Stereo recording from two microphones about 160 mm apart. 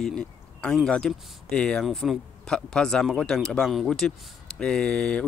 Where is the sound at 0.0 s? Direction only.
5° left (ahead or behind).